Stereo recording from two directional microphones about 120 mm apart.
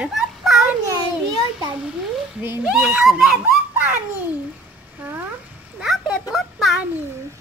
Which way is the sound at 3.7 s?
15° right (ahead or behind).